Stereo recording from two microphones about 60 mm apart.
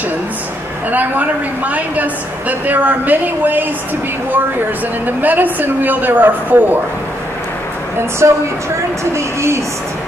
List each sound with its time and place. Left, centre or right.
0.9 s a woman's voice: right
5.0 s a woman's voice: right
8.2 s a woman's voice: right